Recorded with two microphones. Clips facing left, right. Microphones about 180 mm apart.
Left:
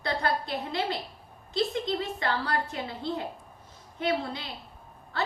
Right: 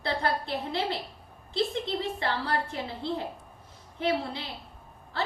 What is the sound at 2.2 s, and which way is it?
A woman's voice, 30° right (ahead or behind).